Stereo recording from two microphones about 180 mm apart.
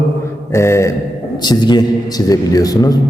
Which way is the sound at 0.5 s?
15° left (ahead or behind).